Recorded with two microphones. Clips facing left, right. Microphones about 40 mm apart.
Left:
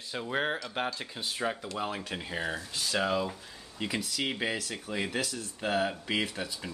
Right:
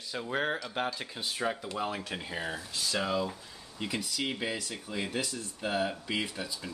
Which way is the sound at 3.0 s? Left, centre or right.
Centre.